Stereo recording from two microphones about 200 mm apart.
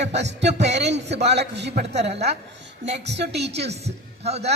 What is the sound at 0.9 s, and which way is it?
Speech, 35° right (ahead or behind).